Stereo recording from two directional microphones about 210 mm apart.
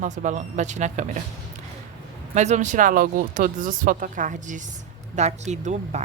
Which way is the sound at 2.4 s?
35° right (ahead or behind).